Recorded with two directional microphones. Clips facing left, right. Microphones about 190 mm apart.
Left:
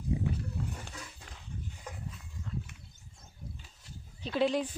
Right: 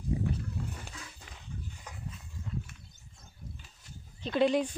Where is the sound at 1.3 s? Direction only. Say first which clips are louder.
Even; 5° right (ahead or behind).